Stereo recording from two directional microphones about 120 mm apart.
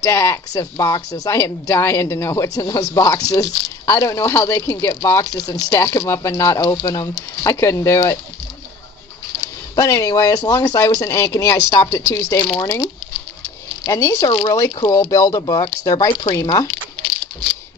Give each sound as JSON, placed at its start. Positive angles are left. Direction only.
{"t": 0.0, "sound": "speech", "side_deg": 25}
{"t": 9.4, "sound": "speech", "side_deg": 30}